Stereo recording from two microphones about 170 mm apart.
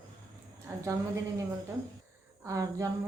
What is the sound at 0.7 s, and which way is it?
Speech, 15° right (ahead or behind).